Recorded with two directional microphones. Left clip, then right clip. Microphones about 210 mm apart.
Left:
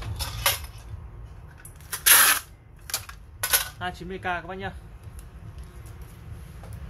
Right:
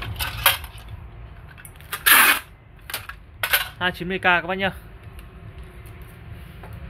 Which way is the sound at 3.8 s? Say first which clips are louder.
Right 9 dB; 45° right (ahead or behind).